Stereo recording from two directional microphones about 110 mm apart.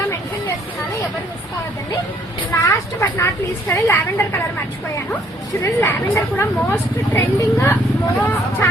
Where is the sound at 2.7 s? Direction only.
25° left (ahead or behind).